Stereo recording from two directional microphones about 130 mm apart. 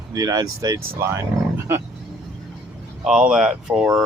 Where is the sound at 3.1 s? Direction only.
5° right (ahead or behind).